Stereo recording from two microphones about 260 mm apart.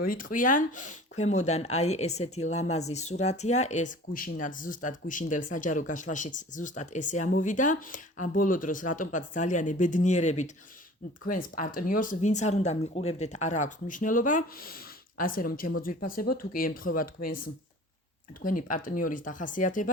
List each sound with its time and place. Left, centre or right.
0.0 s speech: left
11.5 s speech: left
18.4 s speech: left